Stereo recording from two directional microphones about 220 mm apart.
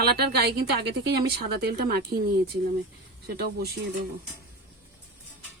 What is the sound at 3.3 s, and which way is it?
Speech, 45° right (ahead or behind).